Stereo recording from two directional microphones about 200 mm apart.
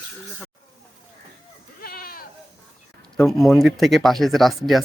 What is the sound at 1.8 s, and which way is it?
Goat, 50° left (ahead or behind).